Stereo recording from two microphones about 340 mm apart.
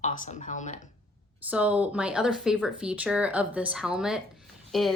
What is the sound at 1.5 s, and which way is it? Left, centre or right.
Speech, centre.